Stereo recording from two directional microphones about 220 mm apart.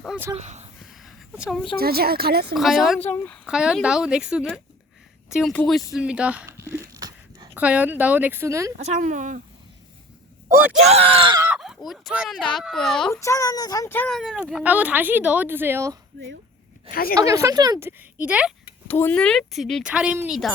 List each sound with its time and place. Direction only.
0.0 s speech: centre (ahead or behind)
0.3 s speech: 30° right (ahead or behind)
0.9 s a sound: centre (ahead or behind)
1.7 s speech: 45° right (ahead or behind)
2.6 s speech: centre (ahead or behind)
5.9 s a sound: 5° right (ahead or behind)
7.6 s a woman's voice: 5° right (ahead or behind)
8.8 s speech: 30° right (ahead or behind)
10.8 s speech: 25° right (ahead or behind)
11.4 s speech: 5° right (ahead or behind)
13.1 s speech: 15° left (ahead or behind); by 16.0 s 10° right (ahead or behind)
16.9 s a woman's voice: 40° left (ahead or behind)
17.2 s a woman's voice: 15° right (ahead or behind)
18.9 s speech: 10° left (ahead or behind)